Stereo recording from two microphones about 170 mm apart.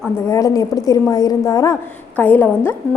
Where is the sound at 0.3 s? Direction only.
20° left (ahead or behind).